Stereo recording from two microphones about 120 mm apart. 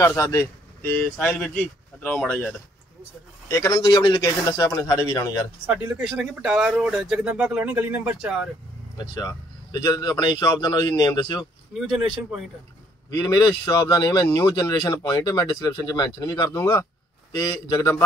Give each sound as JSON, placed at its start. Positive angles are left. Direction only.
{"t": 0.0, "sound": "speech", "side_deg": 20}
{"t": 3.4, "sound": "speech", "side_deg": 25}
{"t": 5.7, "sound": "speech", "side_deg": -10}
{"t": 8.9, "sound": "a man's voice", "side_deg": 35}
{"t": 11.9, "sound": "speech", "side_deg": -5}
{"t": 13.1, "sound": "a man's voice", "side_deg": 30}
{"t": 17.7, "sound": "speech", "side_deg": 25}